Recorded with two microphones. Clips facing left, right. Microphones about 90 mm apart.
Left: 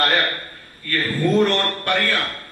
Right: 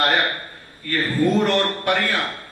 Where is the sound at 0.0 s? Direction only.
15° right (ahead or behind).